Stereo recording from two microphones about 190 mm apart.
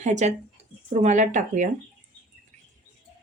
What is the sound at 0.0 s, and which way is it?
A woman's voice, 40° right (ahead or behind).